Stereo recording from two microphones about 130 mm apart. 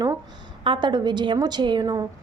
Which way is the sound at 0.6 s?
40° right (ahead or behind).